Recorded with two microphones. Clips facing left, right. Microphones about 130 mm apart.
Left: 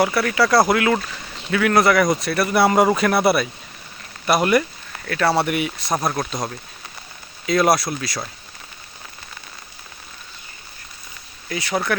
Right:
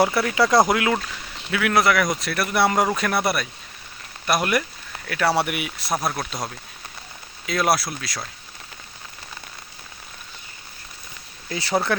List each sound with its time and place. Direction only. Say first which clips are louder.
0.0 s speech: left 1 dB; 20° right (ahead or behind)
1.5 s speech: left 3 dB; 5° right (ahead or behind)
5.0 s speech: left 2 dB; 10° right (ahead or behind)
11.4 s speech: even; 30° right (ahead or behind)